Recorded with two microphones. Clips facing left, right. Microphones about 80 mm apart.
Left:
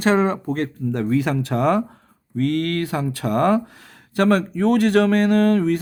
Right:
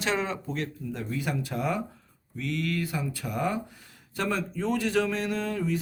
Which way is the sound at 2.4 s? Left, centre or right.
Left.